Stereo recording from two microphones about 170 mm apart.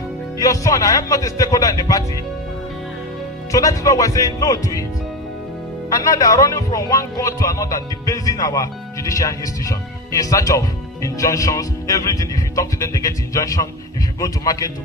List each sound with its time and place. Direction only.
0.3 s speech: 20° left (ahead or behind)
3.5 s speech: 20° left (ahead or behind)
5.9 s speech: 20° left (ahead or behind)